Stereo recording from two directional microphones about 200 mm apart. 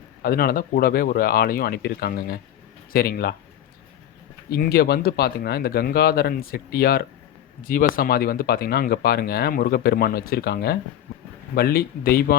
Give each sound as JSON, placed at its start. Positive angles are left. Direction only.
{"t": 0.2, "sound": "speech", "side_deg": 50}
{"t": 4.4, "sound": "speech", "side_deg": 50}